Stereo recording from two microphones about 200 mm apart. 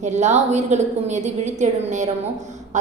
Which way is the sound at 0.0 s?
35° right (ahead or behind).